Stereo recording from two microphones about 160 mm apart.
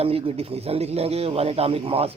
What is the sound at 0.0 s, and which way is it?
Speech, 35° right (ahead or behind).